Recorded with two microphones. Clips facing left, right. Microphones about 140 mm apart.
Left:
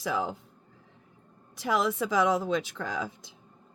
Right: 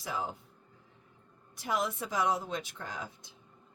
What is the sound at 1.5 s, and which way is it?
A woman's voice, 90° left.